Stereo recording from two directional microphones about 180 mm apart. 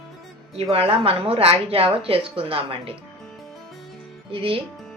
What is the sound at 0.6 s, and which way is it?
A woman's voice, 30° right (ahead or behind).